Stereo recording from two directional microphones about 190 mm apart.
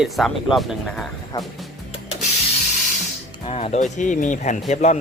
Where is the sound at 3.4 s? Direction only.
30° left (ahead or behind).